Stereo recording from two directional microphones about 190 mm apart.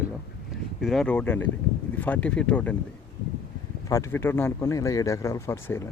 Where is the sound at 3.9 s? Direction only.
10° left (ahead or behind).